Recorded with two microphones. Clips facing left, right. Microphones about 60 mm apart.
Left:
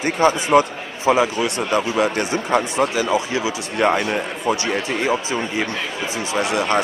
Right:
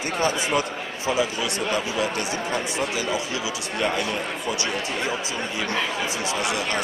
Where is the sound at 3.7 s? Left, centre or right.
Left.